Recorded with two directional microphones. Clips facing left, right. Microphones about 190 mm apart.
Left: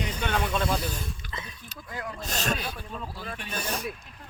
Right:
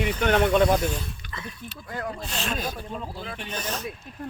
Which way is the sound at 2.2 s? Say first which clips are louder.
Even; 40° left (ahead or behind).